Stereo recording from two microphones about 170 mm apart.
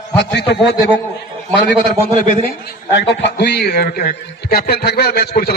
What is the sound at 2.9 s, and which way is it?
Speech, 90° left.